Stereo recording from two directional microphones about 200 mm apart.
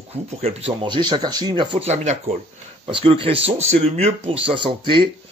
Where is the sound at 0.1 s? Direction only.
30° right (ahead or behind).